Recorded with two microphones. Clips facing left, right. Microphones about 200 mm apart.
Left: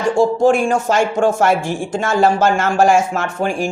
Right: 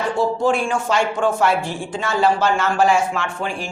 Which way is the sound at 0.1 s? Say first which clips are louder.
Left 7 dB; 45° left (ahead or behind).